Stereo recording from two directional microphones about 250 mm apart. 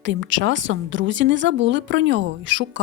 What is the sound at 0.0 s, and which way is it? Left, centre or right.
Speech, right.